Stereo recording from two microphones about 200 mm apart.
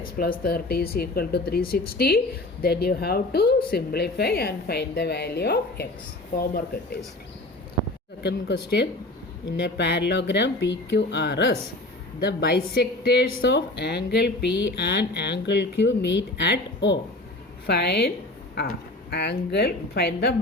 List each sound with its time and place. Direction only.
0.0 s a woman's voice: 45° left (ahead or behind)
8.2 s a woman's voice: 55° left (ahead or behind)
19.1 s a woman's voice: 55° left (ahead or behind)